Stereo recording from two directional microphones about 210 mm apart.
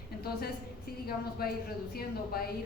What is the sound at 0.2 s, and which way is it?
A woman's voice, 45° left (ahead or behind).